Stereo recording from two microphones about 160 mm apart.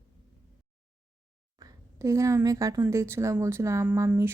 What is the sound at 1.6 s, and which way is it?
A woman's voice, 20° right (ahead or behind).